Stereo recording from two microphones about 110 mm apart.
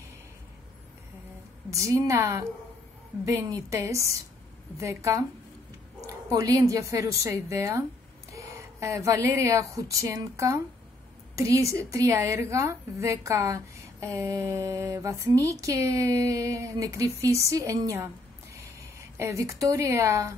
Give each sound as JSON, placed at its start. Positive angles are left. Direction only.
{"t": 1.7, "sound": "a woman's voice", "side_deg": -30}